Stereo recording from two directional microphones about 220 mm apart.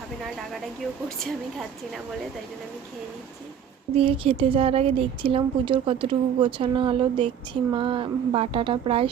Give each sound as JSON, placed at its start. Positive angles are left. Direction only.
{"t": 3.9, "sound": "a woman's voice", "side_deg": -25}